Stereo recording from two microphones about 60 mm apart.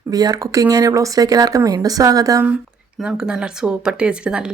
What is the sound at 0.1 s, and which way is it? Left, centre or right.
Speech, right.